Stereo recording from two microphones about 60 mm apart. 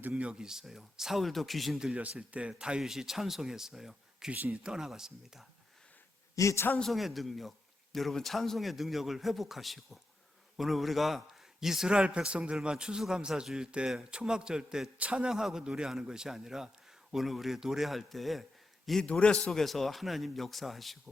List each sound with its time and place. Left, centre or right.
0.1 s speech: centre
1.8 s speech: right
4.3 s speech: right
4.5 s speech: centre
6.3 s a woman's voice: left
6.9 s speech: centre
19.0 s a man's voice: centre
19.5 s speech: centre